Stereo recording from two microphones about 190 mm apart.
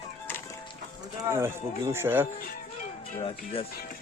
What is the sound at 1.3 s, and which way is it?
Speech, 15° right (ahead or behind).